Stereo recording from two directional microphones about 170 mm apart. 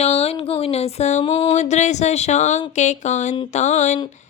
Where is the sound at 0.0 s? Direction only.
35° left (ahead or behind).